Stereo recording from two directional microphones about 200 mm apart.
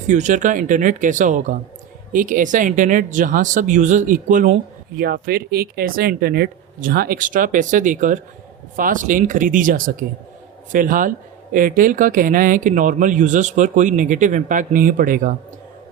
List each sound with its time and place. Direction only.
0.1 s speech: 35° right (ahead or behind)